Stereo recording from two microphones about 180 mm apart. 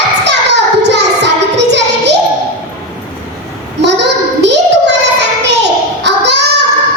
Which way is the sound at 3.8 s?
70° right (ahead or behind).